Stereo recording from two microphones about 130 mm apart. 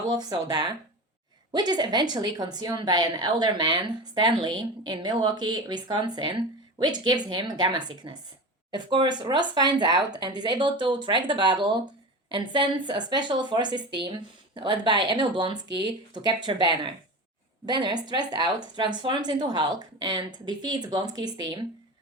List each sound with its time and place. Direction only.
0.0 s a woman's voice: 30° right (ahead or behind)